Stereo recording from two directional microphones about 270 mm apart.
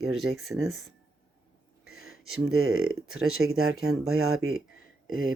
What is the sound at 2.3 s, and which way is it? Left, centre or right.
Speech, right.